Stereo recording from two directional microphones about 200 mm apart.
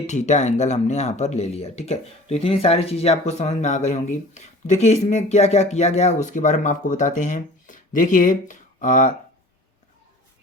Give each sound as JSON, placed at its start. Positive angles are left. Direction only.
{"t": 0.1, "sound": "speech", "side_deg": 35}